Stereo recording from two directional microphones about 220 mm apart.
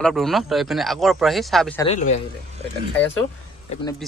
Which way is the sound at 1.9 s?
30° left (ahead or behind).